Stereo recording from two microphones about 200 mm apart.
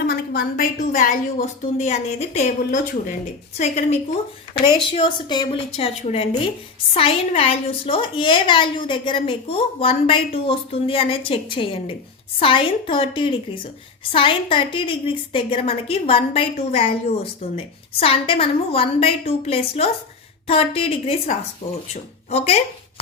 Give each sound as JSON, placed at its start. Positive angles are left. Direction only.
{"t": 0.0, "sound": "a woman's voice", "side_deg": 50}
{"t": 18.0, "sound": "a woman's voice", "side_deg": 30}